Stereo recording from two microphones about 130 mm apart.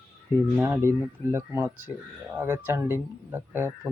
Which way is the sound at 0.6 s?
20° right (ahead or behind).